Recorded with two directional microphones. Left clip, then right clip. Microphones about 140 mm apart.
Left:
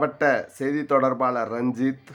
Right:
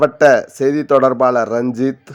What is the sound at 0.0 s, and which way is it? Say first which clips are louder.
A man's voice: right 11 dB; 40° right (ahead or behind).